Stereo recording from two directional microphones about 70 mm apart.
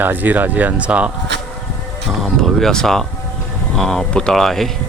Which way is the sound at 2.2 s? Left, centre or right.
Centre.